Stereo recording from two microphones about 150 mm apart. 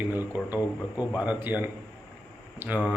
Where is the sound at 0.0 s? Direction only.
15° right (ahead or behind).